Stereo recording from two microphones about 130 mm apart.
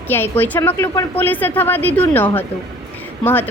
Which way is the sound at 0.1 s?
15° left (ahead or behind).